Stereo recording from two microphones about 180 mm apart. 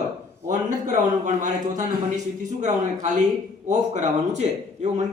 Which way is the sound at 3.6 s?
40° right (ahead or behind).